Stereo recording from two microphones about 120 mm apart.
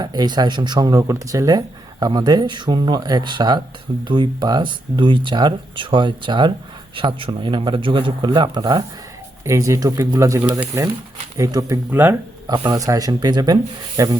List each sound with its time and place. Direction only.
0.0 s speech: 35° right (ahead or behind)
9.4 s speech: 25° right (ahead or behind)
11.9 s speech: 15° right (ahead or behind)
12.7 s speech: 30° right (ahead or behind)